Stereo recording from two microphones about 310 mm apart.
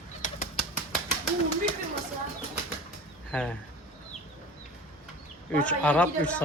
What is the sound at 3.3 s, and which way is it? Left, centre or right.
Speech, centre.